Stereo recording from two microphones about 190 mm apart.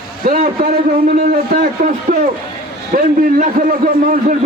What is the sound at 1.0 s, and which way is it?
A man's voice, 50° right (ahead or behind).